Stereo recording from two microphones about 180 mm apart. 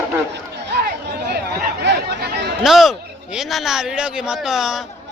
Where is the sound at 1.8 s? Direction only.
65° right (ahead or behind).